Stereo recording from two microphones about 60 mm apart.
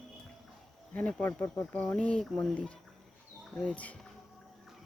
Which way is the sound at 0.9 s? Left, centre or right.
Left.